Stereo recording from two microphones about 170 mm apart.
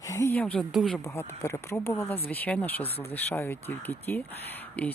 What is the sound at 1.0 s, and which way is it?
Speech, 15° left (ahead or behind).